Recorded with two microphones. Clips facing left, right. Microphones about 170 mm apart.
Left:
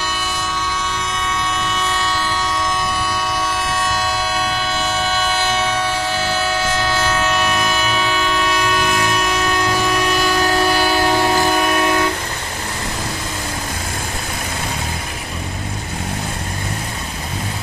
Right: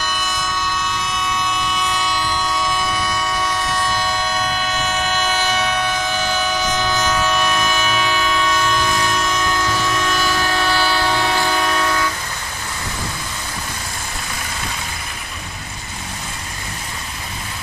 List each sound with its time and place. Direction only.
6.1 s train: 30° left (ahead or behind)
7.3 s train: 5° left (ahead or behind)
11.1 s train: 40° left (ahead or behind)
11.4 s train: 15° left (ahead or behind)